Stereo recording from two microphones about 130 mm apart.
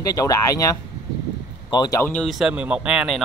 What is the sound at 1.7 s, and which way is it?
Speech, 30° left (ahead or behind).